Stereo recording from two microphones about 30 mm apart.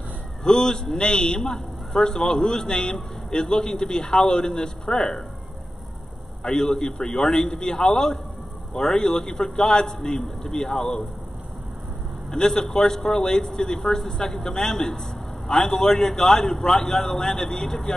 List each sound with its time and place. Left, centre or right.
0.4 s a man's voice: left
6.4 s a man's voice: centre
12.3 s a man's voice: centre